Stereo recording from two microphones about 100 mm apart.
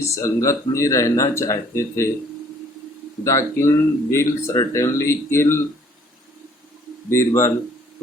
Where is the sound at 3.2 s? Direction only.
30° left (ahead or behind).